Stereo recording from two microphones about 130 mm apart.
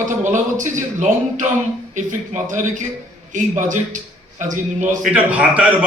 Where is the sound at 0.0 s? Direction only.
75° right (ahead or behind).